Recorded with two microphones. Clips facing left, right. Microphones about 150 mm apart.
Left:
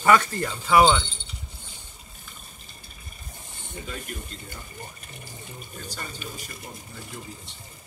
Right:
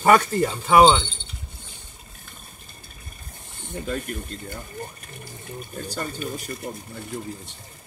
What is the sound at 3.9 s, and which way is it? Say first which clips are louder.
Speech: right 8 dB; 50° right (ahead or behind).